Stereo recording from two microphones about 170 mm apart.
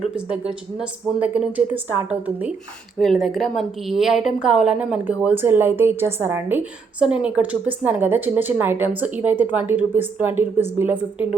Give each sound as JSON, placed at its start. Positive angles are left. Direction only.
{"t": 0.3, "sound": "speech", "side_deg": -5}